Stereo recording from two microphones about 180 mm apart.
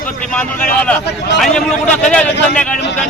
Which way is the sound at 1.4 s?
5° left (ahead or behind).